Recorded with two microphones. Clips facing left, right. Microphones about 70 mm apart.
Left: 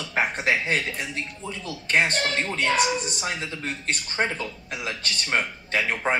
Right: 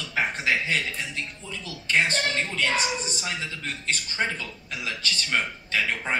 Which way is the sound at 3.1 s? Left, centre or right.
Left.